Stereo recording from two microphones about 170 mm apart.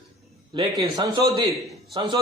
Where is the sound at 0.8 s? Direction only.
20° right (ahead or behind).